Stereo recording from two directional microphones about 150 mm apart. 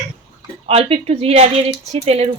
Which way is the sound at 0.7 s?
40° right (ahead or behind).